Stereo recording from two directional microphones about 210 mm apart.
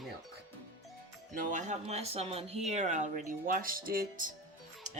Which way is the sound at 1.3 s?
35° right (ahead or behind).